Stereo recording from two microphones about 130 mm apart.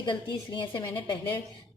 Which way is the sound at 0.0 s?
40° left (ahead or behind).